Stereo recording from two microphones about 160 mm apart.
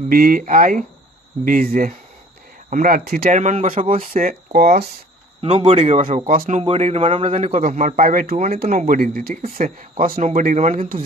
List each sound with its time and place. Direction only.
0.1 s speech: 60° right (ahead or behind)
5.7 s speech: 45° right (ahead or behind); by 6.6 s 60° right (ahead or behind)
6.6 s speech: 40° right (ahead or behind); by 11.1 s 60° right (ahead or behind)